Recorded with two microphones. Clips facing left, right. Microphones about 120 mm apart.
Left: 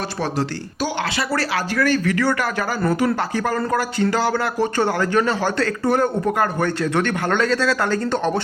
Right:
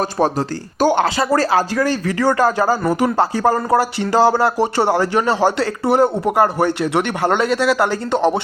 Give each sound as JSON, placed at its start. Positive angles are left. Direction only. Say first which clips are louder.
{"t": 0.2, "sound": "speech", "louder": "right 4 dB", "side_deg": -45}
{"t": 1.8, "sound": "speech", "louder": "right 1 dB", "side_deg": -30}
{"t": 2.8, "sound": "speech", "louder": "right 2 dB", "side_deg": -15}
{"t": 3.2, "sound": "speech", "louder": "right 6 dB", "side_deg": -30}